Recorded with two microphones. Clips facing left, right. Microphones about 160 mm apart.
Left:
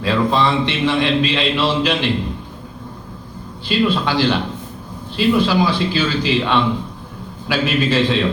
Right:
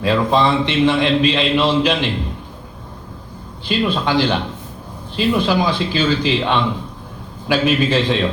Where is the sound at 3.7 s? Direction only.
15° right (ahead or behind).